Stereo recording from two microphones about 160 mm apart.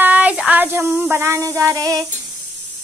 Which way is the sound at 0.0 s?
10° right (ahead or behind).